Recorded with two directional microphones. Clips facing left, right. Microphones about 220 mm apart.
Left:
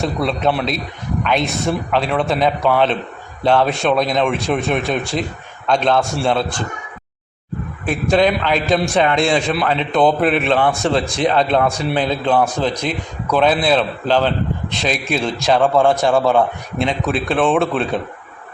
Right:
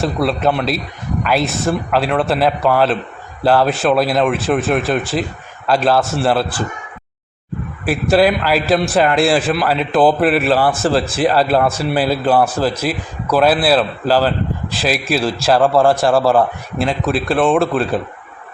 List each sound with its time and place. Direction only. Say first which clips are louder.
0.0 s a man's voice: right 2 dB; 5° right (ahead or behind)
7.9 s a man's voice: right 2 dB; 5° right (ahead or behind)